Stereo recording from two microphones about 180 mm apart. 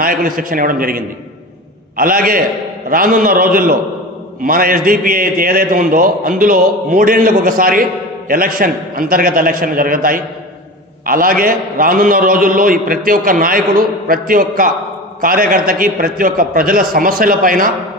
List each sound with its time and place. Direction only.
0.0 s a man's voice: 50° right (ahead or behind)